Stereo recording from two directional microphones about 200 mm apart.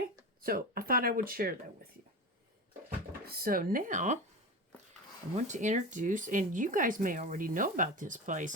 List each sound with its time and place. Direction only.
0.4 s speech: 45° right (ahead or behind)
3.2 s speech: 50° right (ahead or behind)
5.5 s speech: 35° right (ahead or behind)